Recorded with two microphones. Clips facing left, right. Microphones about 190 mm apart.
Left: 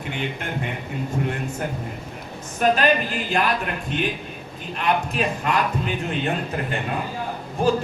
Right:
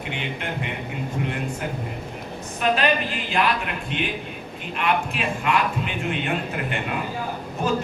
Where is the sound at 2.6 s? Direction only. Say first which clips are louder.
Left 3 dB; 45° left (ahead or behind).